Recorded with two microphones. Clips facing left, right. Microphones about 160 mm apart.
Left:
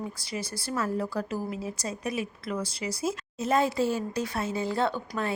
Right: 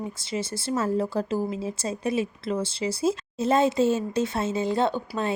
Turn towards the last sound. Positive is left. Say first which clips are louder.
# right 3 dB
turn(degrees=-20)  # may be behind; listen again after turning